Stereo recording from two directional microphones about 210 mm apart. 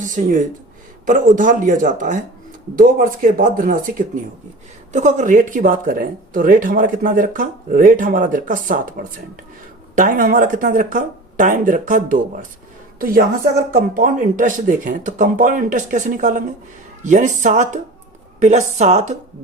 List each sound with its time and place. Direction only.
0.0 s speech: 40° right (ahead or behind)